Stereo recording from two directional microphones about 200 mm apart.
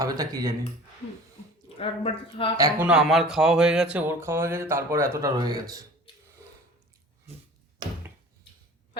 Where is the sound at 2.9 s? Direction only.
5° right (ahead or behind); by 5.8 s 20° right (ahead or behind).